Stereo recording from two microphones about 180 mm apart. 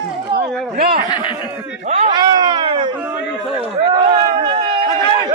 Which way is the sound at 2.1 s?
25° right (ahead or behind).